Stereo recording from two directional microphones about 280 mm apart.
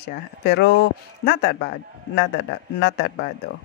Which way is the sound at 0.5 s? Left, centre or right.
Left.